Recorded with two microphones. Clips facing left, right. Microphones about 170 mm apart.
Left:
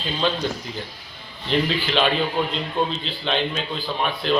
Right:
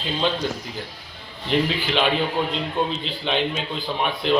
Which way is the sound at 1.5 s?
10° right (ahead or behind).